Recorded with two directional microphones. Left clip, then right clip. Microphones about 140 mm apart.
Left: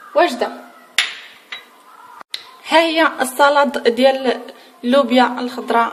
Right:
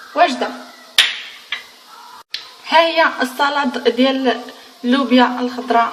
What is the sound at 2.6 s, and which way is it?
Speech, 55° left (ahead or behind).